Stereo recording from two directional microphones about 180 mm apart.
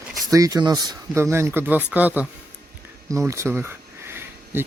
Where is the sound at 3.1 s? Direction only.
15° right (ahead or behind).